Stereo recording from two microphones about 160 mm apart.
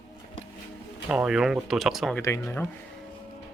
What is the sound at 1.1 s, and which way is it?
Speech, 5° right (ahead or behind).